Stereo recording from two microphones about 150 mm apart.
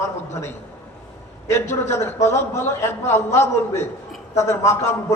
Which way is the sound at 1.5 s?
15° left (ahead or behind).